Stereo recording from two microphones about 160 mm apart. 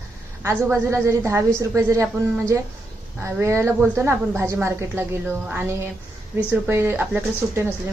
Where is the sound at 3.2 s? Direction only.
15° right (ahead or behind).